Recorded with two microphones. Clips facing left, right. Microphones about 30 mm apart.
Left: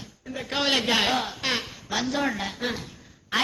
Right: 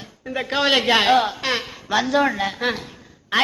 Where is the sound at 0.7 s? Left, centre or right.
Right.